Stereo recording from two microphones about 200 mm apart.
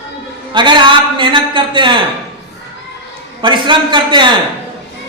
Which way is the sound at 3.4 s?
25° right (ahead or behind).